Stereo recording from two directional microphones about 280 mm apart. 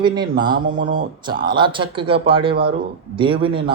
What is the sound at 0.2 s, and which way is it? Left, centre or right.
Speech, centre.